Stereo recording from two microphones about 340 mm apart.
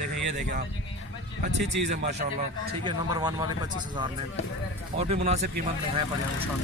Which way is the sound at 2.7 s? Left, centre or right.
Centre.